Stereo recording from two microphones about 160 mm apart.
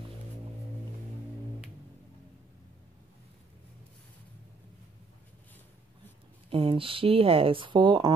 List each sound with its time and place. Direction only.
6.5 s speech: 35° right (ahead or behind)